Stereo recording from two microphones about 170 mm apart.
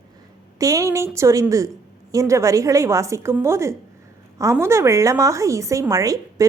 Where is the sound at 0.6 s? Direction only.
20° right (ahead or behind).